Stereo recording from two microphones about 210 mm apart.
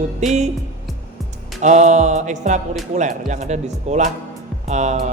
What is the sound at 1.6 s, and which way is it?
Speech, 35° right (ahead or behind).